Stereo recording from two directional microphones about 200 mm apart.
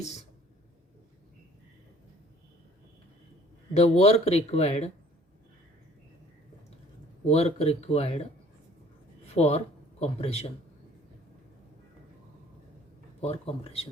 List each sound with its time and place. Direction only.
3.8 s speech: 30° left (ahead or behind)
7.3 s speech: 30° left (ahead or behind)
9.3 s speech: 30° left (ahead or behind)
13.2 s speech: 30° left (ahead or behind)